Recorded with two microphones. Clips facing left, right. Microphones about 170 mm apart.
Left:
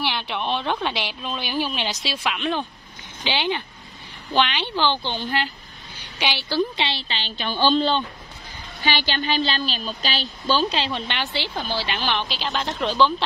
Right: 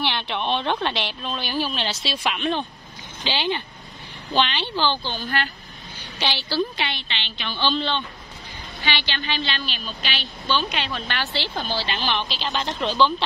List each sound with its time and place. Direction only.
0.0 s a woman's voice: 5° left (ahead or behind); by 5.5 s 25° left (ahead or behind)
6.1 s a woman's voice: 10° left (ahead or behind)
6.8 s a woman's voice: 35° left (ahead or behind); by 13.1 s 10° left (ahead or behind)